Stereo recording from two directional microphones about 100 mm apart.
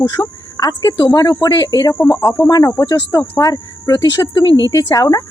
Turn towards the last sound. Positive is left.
turn(degrees=35)  # may be behind; listen again after turning